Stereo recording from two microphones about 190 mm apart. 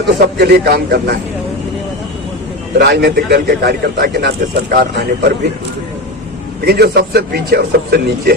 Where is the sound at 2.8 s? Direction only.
60° right (ahead or behind).